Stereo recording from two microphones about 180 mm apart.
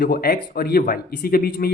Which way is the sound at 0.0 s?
55° left (ahead or behind).